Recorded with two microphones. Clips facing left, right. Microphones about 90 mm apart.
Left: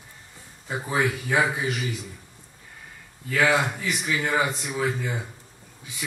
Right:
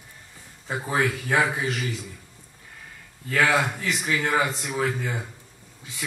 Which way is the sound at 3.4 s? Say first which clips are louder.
Left 1 dB; 20° left (ahead or behind).